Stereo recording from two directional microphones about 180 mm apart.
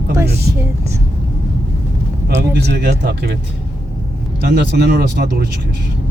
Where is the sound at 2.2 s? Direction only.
65° right (ahead or behind).